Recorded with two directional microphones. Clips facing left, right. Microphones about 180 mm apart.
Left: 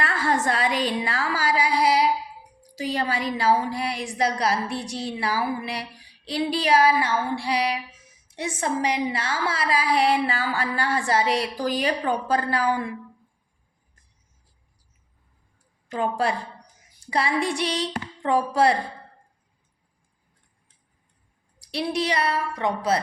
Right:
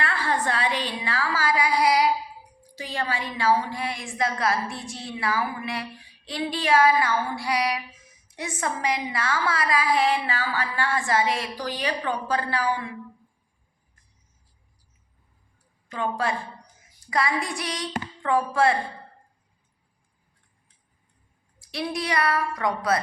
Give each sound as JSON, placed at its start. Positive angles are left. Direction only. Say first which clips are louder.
{"t": 0.0, "sound": "a sound", "louder": "left 2 dB", "side_deg": 45}
{"t": 2.7, "sound": "a woman's voice", "louder": "left 4 dB", "side_deg": 40}
{"t": 7.0, "sound": "a woman's voice", "louder": "left 1 dB", "side_deg": 30}
{"t": 11.5, "sound": "a woman's voice", "louder": "left 4 dB", "side_deg": 45}
{"t": 15.9, "sound": "a woman's voice", "louder": "left 3 dB", "side_deg": 40}
{"t": 21.7, "sound": "a woman's voice", "louder": "left 3 dB", "side_deg": 30}